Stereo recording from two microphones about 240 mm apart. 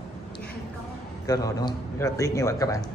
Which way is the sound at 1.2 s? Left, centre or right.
Centre.